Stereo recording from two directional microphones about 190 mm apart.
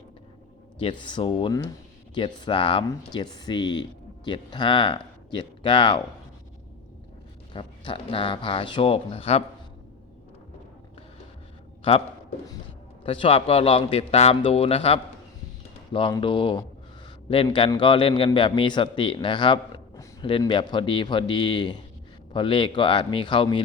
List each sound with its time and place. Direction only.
0.8 s a man's voice: 25° left (ahead or behind)
7.5 s a man's voice: 25° left (ahead or behind)
11.8 s a man's voice: 30° left (ahead or behind)
13.1 s a man's voice: 30° left (ahead or behind)